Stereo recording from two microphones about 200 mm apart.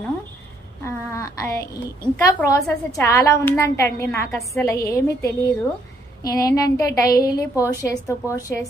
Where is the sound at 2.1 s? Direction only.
15° left (ahead or behind).